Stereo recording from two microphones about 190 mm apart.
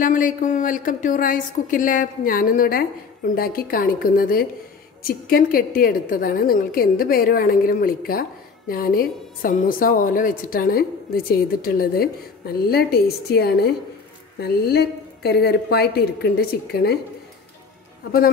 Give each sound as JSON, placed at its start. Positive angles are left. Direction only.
{"t": 0.0, "sound": "a woman's voice", "side_deg": 45}